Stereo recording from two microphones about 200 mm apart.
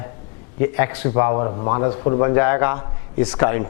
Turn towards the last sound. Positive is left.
turn(degrees=15)  # may be behind; listen again after turning